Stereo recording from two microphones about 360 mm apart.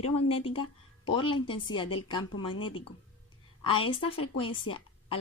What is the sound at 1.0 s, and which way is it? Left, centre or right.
Speech, centre.